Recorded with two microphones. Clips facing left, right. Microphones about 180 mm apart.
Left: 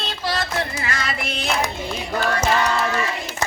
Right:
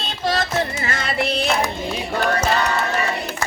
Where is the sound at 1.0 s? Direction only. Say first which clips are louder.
Right 6 dB; 30° right (ahead or behind).